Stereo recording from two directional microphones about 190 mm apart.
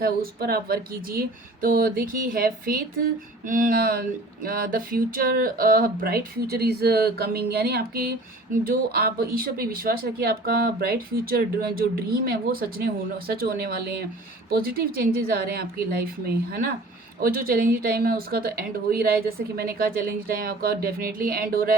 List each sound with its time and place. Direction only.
0.0 s speech: 55° right (ahead or behind)